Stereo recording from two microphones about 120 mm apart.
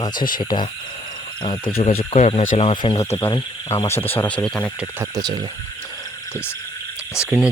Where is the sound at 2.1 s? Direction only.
70° left (ahead or behind).